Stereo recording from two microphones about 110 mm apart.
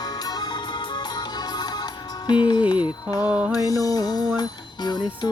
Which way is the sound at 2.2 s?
45° left (ahead or behind).